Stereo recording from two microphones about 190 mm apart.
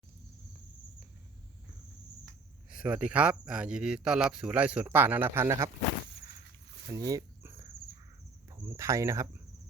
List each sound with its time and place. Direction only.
2.7 s speech: 5° right (ahead or behind)
7.1 s cricket: 20° right (ahead or behind)
8.6 s speech: 15° right (ahead or behind)